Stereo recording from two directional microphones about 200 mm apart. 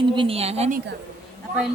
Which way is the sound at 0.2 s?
30° right (ahead or behind).